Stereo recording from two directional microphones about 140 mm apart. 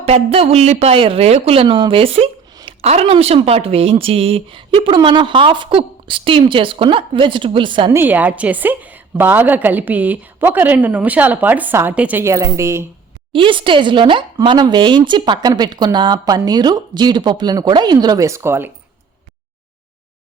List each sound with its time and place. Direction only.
0.0 s speech: 45° right (ahead or behind)
1.6 s speech: 35° right (ahead or behind)
7.9 s a woman's voice: 15° right (ahead or behind)
13.3 s speech: 35° right (ahead or behind); by 18.7 s 15° right (ahead or behind)